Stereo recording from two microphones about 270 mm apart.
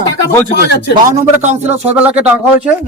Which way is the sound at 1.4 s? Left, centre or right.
Right.